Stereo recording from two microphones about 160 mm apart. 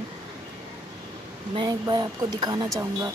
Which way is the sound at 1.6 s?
30° right (ahead or behind).